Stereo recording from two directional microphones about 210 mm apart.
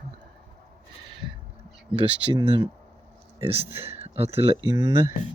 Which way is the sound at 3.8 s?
30° right (ahead or behind).